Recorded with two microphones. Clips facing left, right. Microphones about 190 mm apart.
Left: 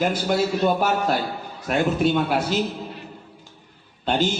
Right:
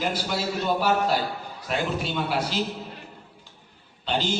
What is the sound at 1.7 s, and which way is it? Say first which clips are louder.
Speech: left 7 dB; 50° left (ahead or behind).